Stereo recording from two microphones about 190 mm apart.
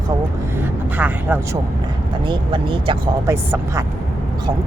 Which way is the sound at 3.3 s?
15° right (ahead or behind).